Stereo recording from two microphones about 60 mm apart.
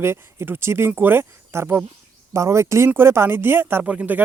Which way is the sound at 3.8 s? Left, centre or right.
Right.